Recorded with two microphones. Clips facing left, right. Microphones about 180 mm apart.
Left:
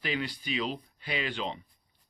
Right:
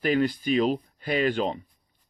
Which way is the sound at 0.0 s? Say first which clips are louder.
Right 10 dB; 45° right (ahead or behind).